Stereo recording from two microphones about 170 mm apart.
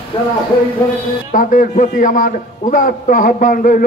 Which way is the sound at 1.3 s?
50° left (ahead or behind).